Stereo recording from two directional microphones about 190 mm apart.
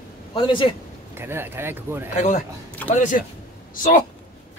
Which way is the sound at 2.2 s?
35° left (ahead or behind).